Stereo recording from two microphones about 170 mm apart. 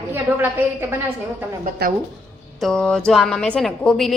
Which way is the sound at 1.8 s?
65° right (ahead or behind).